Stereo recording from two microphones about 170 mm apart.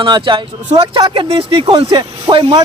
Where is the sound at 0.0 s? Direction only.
30° right (ahead or behind).